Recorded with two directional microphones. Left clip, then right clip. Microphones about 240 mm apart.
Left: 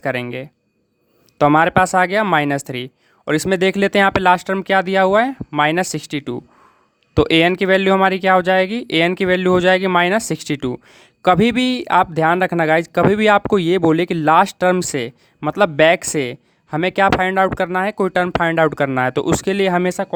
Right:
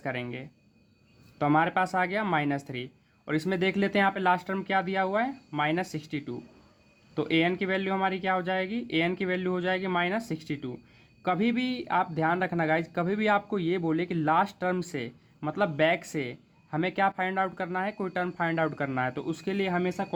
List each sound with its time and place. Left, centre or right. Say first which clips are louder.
0.0 s speech: left 12 dB; left